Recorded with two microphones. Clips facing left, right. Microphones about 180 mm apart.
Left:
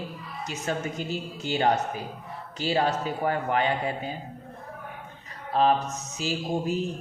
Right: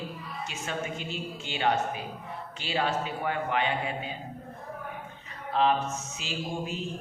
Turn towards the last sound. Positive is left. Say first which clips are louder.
# left 6 dB
turn(degrees=40)  # may be behind; listen again after turning